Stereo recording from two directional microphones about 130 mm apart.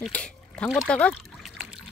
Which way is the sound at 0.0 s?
10° left (ahead or behind).